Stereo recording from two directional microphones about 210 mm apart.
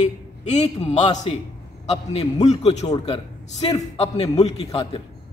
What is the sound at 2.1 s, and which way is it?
A man's voice, 30° left (ahead or behind).